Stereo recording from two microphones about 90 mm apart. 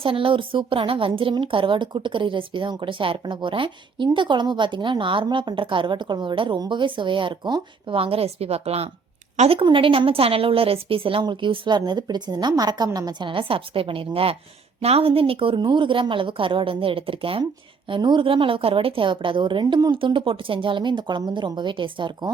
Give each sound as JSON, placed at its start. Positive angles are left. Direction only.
{"t": 0.0, "sound": "a woman's voice", "side_deg": -85}
{"t": 9.5, "sound": "speech", "side_deg": -80}
{"t": 13.2, "sound": "a woman's voice", "side_deg": -75}
{"t": 15.6, "sound": "a woman's voice", "side_deg": -65}
{"t": 17.8, "sound": "a woman's voice", "side_deg": -60}